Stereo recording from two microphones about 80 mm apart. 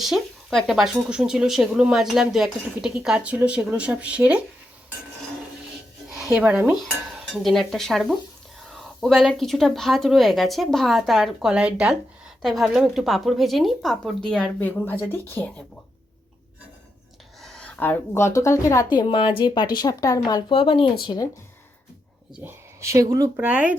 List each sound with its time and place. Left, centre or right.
0.0 s speech: centre
6.1 s a sound: centre
6.4 s a woman's voice: centre
11.5 s a woman's voice: centre
14.6 s speech: left
17.4 s a sound: centre
17.7 s speech: left
18.2 s a woman's voice: left
18.9 s a woman's voice: left
20.6 s speech: left
22.4 s speech: right
23.4 s speech: centre